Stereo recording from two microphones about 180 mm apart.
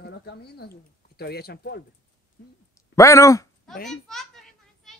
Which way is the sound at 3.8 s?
Centre (ahead or behind).